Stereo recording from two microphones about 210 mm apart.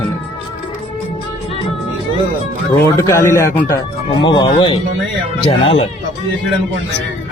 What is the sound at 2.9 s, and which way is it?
Speech, 10° left (ahead or behind).